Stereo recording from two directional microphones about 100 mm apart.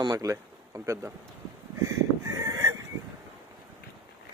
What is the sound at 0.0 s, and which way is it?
Speech, 40° right (ahead or behind).